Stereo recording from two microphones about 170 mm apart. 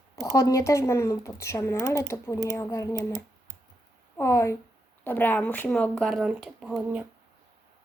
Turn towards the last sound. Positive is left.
turn(degrees=-5)  # may be behind; listen again after turning